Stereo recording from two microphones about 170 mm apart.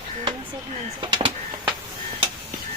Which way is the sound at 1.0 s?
30° right (ahead or behind).